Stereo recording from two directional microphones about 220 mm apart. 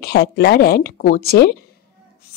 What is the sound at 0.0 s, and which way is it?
A woman's voice, 50° left (ahead or behind).